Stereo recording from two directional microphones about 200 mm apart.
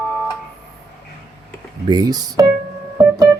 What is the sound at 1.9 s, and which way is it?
Music, 20° right (ahead or behind).